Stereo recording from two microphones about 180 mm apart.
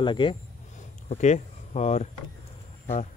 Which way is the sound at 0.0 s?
25° left (ahead or behind).